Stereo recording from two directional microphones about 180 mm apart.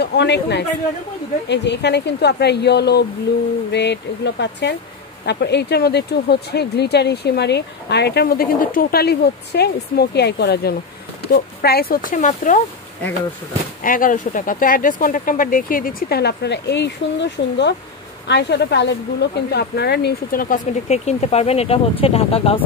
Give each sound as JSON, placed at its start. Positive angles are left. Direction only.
{"t": 0.0, "sound": "a man's voice", "side_deg": 70}
{"t": 13.8, "sound": "speech", "side_deg": 50}